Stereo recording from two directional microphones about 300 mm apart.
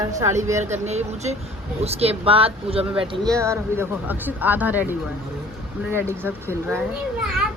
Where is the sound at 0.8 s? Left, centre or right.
Right.